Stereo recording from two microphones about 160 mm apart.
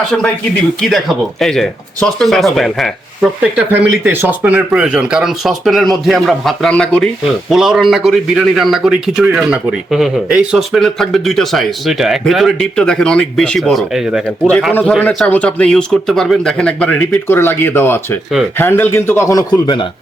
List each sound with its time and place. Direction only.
0.8 s a man's voice: centre (ahead or behind)
3.7 s a man's voice: 10° right (ahead or behind)
14.7 s speech: 10° left (ahead or behind); by 19.8 s 25° left (ahead or behind)